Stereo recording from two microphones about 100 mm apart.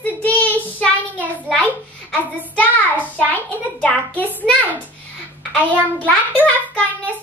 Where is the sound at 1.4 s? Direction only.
15° left (ahead or behind).